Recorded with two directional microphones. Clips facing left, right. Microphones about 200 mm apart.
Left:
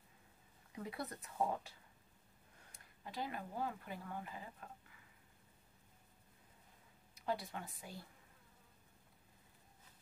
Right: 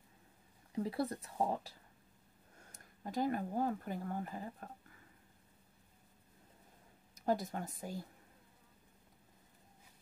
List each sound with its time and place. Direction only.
0.7 s speech: 35° right (ahead or behind)
2.7 s speech: 45° right (ahead or behind)
7.2 s speech: 45° right (ahead or behind)